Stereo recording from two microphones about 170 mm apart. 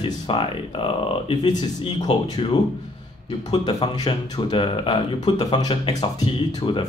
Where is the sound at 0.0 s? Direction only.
30° left (ahead or behind).